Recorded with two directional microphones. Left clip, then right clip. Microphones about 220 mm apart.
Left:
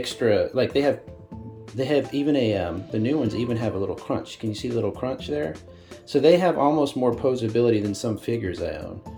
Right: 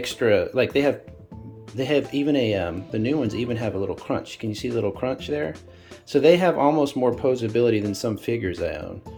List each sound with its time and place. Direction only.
0.0 s speech: 5° right (ahead or behind)